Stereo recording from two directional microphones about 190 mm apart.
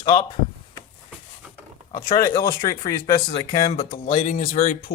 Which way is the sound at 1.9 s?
30° left (ahead or behind).